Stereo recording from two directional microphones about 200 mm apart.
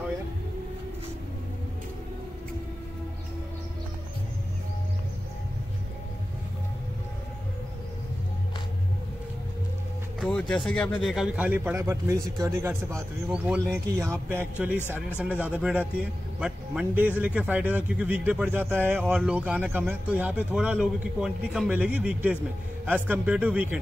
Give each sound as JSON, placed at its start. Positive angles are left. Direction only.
{"t": 11.0, "sound": "speech", "side_deg": 0}
{"t": 12.9, "sound": "speech", "side_deg": 0}
{"t": 13.8, "sound": "speech", "side_deg": -15}